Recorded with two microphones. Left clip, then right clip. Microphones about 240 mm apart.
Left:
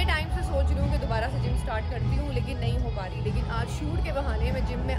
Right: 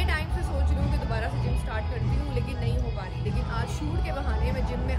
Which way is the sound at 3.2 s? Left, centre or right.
Centre.